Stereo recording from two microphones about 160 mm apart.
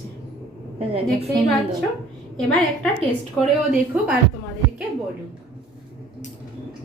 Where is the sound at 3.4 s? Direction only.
5° right (ahead or behind).